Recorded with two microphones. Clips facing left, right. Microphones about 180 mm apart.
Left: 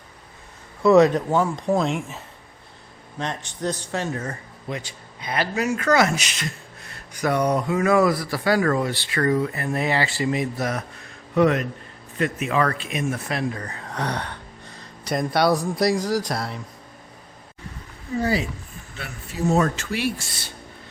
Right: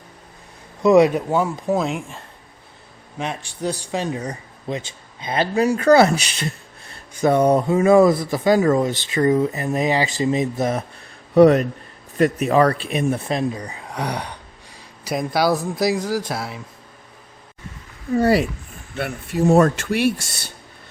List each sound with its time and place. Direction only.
0.8 s speech: 15° right (ahead or behind); by 2.2 s centre (ahead or behind)
3.2 s a man's voice: 10° right (ahead or behind); by 10.8 s 25° right (ahead or behind)
11.3 s a man's voice: 35° right (ahead or behind); by 16.6 s 5° right (ahead or behind)
18.2 s speech: 65° right (ahead or behind)